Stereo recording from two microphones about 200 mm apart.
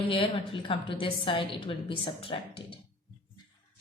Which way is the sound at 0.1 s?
25° left (ahead or behind).